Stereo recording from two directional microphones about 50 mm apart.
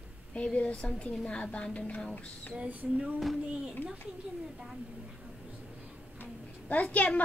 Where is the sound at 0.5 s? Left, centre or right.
Left.